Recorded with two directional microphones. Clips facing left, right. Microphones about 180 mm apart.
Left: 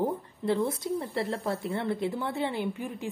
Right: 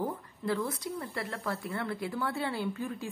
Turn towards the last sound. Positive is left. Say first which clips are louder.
# left 2 dB
turn(degrees=20)  # may be behind; listen again after turning